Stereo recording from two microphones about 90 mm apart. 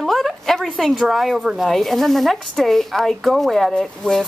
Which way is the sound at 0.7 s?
Centre (ahead or behind).